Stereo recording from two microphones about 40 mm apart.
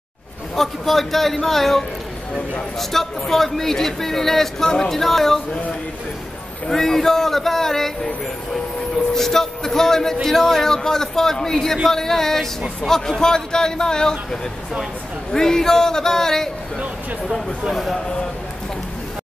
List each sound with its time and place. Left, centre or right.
0.6 s speech: centre
6.7 s speech: centre